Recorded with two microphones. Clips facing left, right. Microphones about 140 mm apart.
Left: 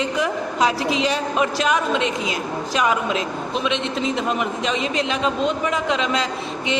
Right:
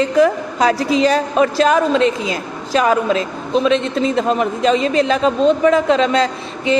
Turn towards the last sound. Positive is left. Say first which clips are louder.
# right 5 dB
turn(degrees=-40)  # may be behind; listen again after turning